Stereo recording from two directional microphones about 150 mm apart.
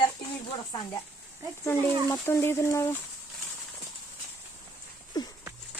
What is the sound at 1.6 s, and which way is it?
Speech, 20° left (ahead or behind).